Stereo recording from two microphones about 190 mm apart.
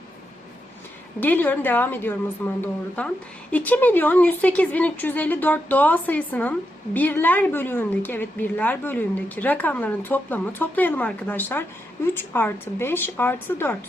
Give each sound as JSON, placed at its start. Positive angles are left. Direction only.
{"t": 1.2, "sound": "a woman's voice", "side_deg": 10}